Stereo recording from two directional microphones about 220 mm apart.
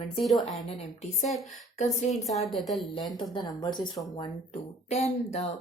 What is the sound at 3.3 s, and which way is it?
Speech, 20° left (ahead or behind).